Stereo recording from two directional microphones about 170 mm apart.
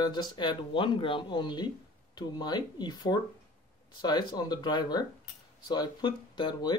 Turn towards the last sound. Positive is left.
turn(degrees=25)  # may be behind; listen again after turning